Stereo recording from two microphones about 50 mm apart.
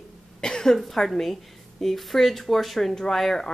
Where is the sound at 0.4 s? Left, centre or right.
Centre.